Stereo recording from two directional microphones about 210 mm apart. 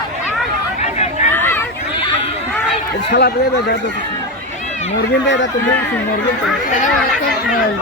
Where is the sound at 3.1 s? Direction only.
55° left (ahead or behind).